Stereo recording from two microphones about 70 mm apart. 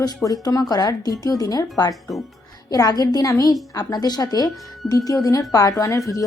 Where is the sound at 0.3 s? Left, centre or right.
Left.